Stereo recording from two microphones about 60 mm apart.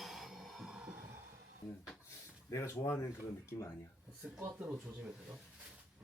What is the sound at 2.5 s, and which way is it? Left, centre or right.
Speech, left.